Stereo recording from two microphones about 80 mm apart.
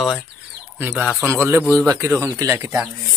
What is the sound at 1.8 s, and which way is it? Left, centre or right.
A man's voice, right.